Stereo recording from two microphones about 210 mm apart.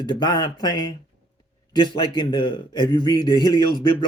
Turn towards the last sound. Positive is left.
turn(degrees=20)  # may be behind; listen again after turning